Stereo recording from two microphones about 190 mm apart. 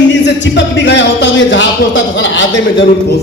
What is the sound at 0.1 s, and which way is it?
Speech, 65° left (ahead or behind).